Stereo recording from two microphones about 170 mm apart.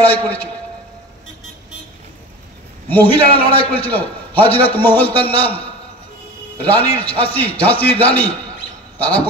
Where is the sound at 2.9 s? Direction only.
10° left (ahead or behind).